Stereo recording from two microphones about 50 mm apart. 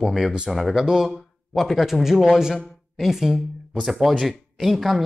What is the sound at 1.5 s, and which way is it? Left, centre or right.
Speech, centre.